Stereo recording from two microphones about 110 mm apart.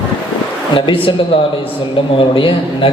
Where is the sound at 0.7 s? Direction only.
50° left (ahead or behind).